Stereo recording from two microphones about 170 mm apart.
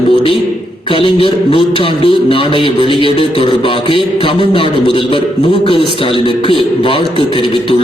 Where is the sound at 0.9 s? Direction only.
30° left (ahead or behind).